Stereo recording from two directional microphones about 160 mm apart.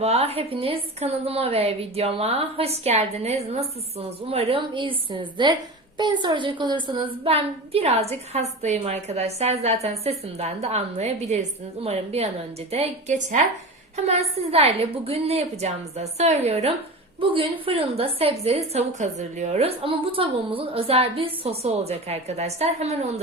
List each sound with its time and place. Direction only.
0.0 s a woman's voice: 40° right (ahead or behind)